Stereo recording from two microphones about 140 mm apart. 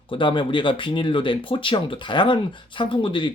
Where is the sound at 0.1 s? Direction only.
35° left (ahead or behind).